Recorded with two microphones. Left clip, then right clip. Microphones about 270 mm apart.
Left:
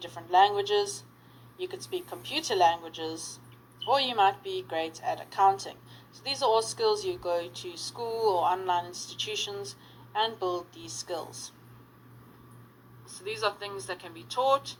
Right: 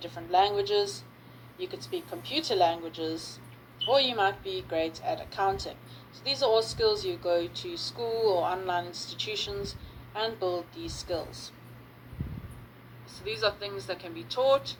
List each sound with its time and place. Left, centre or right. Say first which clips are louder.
0.0 s speech: left 2 dB; left
13.2 s speech: right 1 dB; left